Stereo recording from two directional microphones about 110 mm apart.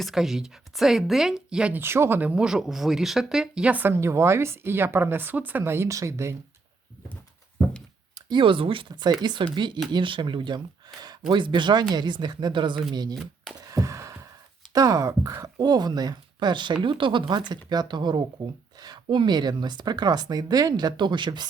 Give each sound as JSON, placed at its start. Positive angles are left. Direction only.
{"t": 0.0, "sound": "a woman's voice", "side_deg": -5}
{"t": 1.8, "sound": "speech", "side_deg": -20}
{"t": 8.3, "sound": "speech", "side_deg": -50}
{"t": 13.7, "sound": "a sound", "side_deg": -30}
{"t": 14.7, "sound": "speech", "side_deg": -35}